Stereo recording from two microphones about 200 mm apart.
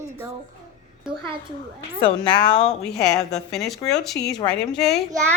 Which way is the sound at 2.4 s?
5° left (ahead or behind).